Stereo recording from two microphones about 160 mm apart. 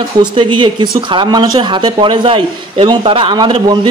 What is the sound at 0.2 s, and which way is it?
Speech, 30° right (ahead or behind).